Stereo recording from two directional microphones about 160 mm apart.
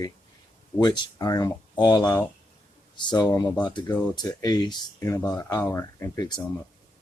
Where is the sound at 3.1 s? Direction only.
25° left (ahead or behind).